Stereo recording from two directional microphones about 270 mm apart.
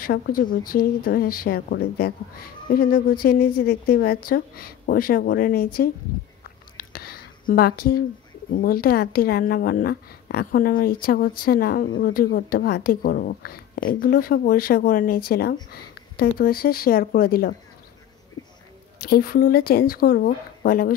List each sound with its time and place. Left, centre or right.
0.0 s a woman's voice: left
6.8 s a sound: left
8.6 s a woman's voice: left
19.0 s a woman's voice: left